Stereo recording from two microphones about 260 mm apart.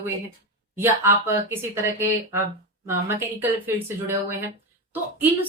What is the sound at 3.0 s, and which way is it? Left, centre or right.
Speech, centre.